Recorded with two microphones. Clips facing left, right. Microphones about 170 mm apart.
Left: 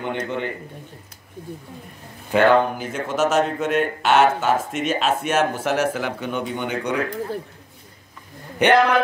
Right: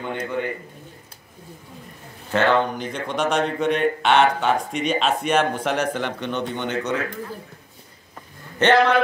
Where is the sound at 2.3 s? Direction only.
10° left (ahead or behind).